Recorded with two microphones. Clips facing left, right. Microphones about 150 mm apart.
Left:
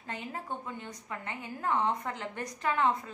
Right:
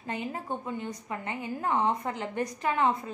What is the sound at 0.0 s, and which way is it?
A woman's voice, 15° right (ahead or behind).